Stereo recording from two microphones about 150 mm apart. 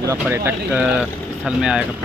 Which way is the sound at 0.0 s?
20° right (ahead or behind).